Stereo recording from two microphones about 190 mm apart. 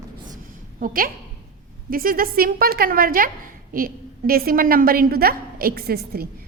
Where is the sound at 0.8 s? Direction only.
50° right (ahead or behind).